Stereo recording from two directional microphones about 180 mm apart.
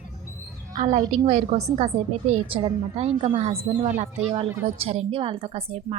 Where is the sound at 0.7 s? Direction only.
45° right (ahead or behind).